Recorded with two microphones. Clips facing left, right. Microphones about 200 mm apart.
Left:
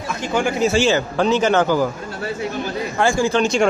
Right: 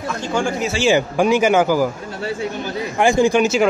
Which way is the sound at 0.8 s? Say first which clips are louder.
Right 2 dB; 10° right (ahead or behind).